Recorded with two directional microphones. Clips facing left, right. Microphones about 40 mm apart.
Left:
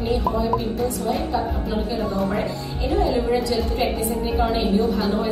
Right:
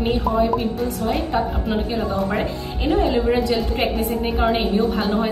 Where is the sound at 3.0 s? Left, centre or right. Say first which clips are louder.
Right 1 dB; right.